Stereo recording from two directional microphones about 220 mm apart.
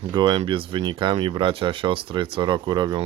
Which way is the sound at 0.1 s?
20° right (ahead or behind).